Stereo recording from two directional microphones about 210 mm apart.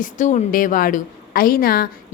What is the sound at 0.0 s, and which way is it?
A woman's voice, 35° left (ahead or behind).